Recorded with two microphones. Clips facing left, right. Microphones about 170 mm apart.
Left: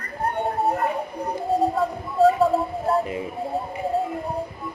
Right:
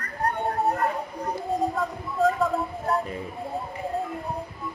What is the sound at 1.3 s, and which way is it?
Speech, 30° left (ahead or behind).